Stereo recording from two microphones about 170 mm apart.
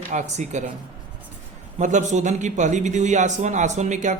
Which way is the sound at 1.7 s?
45° right (ahead or behind).